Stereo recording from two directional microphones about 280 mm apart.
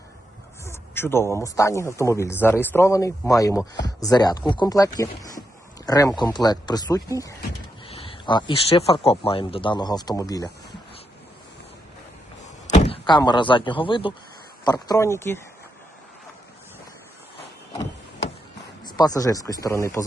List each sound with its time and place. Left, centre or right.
0.6 s speech: centre
12.6 s speech: left
18.9 s speech: centre